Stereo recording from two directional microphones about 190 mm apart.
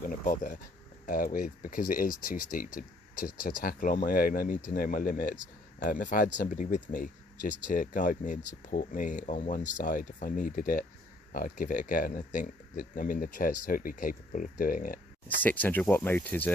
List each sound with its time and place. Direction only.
0.1 s speech: 45° left (ahead or behind)
15.4 s speech: 10° left (ahead or behind)